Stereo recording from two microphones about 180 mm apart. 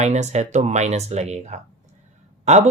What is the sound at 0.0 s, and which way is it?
Speech, 40° right (ahead or behind).